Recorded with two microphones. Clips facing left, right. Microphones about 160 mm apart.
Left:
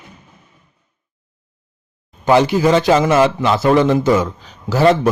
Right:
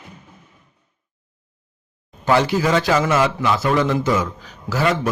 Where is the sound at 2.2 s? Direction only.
20° left (ahead or behind).